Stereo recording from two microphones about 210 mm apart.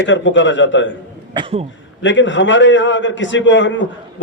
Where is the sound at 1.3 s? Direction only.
25° right (ahead or behind).